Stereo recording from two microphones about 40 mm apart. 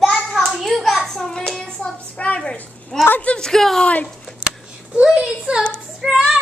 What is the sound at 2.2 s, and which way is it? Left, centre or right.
Speech, left.